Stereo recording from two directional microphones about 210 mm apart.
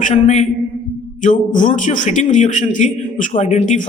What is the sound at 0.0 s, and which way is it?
A man's voice, 35° left (ahead or behind).